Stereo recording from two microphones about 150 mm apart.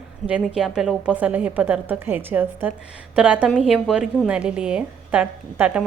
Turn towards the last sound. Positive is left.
turn(degrees=-10)  # may be behind; listen again after turning